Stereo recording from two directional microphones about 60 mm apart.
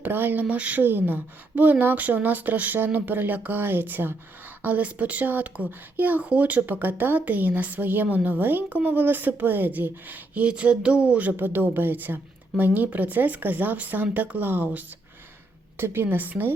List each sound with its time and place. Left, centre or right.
0.0 s speech: right
0.4 s speech: right
0.8 s speech: right
10.5 s speech: centre